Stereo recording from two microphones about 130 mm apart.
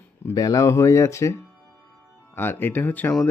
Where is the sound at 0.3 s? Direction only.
30° left (ahead or behind).